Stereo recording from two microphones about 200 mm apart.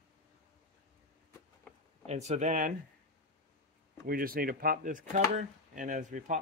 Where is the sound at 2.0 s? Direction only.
35° right (ahead or behind).